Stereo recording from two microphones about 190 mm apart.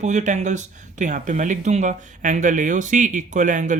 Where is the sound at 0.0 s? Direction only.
40° right (ahead or behind).